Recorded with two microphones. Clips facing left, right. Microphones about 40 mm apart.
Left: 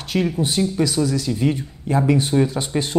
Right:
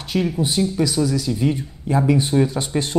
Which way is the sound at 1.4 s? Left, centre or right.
Centre.